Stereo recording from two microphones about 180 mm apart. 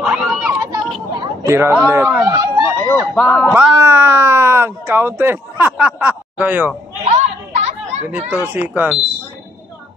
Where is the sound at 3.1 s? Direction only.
5° left (ahead or behind).